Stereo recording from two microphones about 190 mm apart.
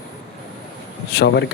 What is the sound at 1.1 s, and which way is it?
Speech, 60° left (ahead or behind).